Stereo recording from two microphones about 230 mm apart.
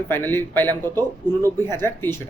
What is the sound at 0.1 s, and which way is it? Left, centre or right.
Speech, centre.